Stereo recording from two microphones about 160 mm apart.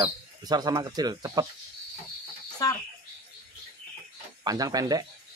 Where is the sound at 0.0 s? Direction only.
25° right (ahead or behind).